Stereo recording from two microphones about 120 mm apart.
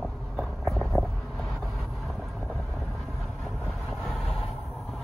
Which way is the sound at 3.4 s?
Centre (ahead or behind).